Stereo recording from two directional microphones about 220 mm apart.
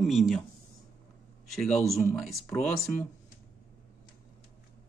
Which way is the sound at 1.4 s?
Centre (ahead or behind).